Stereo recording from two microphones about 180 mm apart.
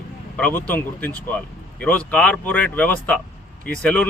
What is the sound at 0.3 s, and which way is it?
Speech, 5° left (ahead or behind).